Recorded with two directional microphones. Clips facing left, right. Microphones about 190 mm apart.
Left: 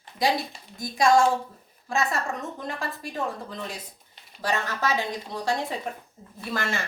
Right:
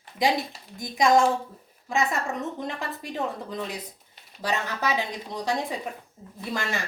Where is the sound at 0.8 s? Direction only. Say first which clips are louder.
Even; 20° right (ahead or behind).